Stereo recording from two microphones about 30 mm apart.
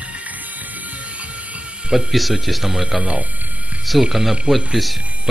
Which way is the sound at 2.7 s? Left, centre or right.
Centre.